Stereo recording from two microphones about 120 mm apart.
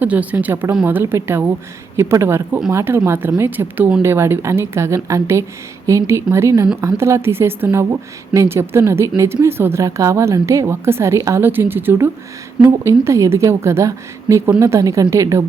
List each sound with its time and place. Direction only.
0.0 s a woman's voice: 10° right (ahead or behind)